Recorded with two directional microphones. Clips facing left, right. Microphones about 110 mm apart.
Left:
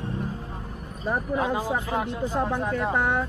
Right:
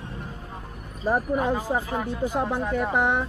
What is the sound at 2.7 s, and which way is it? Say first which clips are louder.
Speech: right 3 dB; 15° right (ahead or behind).